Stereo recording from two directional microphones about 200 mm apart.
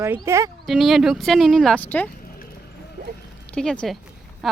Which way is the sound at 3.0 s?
40° right (ahead or behind).